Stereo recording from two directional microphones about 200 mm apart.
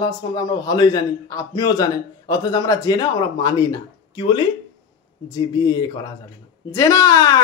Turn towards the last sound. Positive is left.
turn(degrees=20)  # may be behind; listen again after turning